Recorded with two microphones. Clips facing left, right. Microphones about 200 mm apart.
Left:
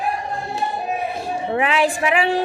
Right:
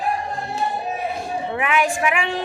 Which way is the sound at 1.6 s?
30° left (ahead or behind).